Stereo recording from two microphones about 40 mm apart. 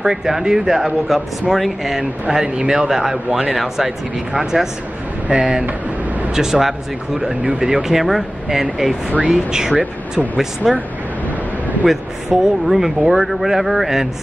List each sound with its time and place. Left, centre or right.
0.0 s a man's voice: centre
2.3 s speech: centre
6.3 s speech: centre
7.4 s speech: right
7.7 s speech: centre
11.8 s a man's voice: centre
12.3 s speech: right
12.6 s a man's voice: centre